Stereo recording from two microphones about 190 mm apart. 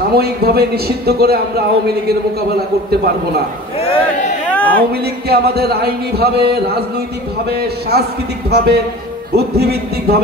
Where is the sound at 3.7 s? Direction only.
30° left (ahead or behind).